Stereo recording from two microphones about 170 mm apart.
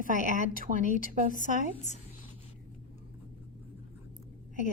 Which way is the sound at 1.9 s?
45° left (ahead or behind).